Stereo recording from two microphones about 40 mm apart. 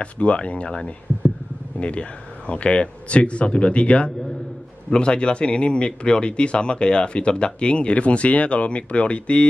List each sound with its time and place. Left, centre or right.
0.0 s speech: left